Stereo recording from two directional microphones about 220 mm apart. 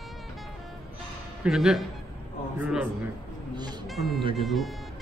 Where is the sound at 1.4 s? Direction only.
Centre (ahead or behind).